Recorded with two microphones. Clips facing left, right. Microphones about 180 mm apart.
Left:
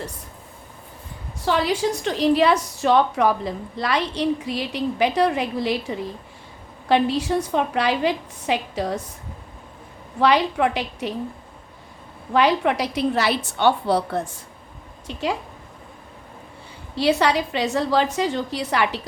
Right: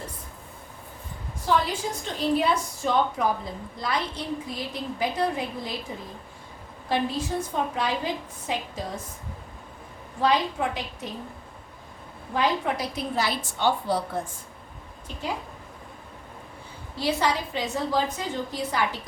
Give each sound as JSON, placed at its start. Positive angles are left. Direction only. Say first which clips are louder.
{"t": 1.5, "sound": "a woman's voice", "louder": "left 4 dB", "side_deg": 80}
{"t": 10.2, "sound": "a woman's voice", "louder": "left 5 dB", "side_deg": 75}
{"t": 12.3, "sound": "a woman's voice", "louder": "left 6 dB", "side_deg": 75}
{"t": 16.9, "sound": "a woman's voice", "louder": "left 6 dB", "side_deg": 80}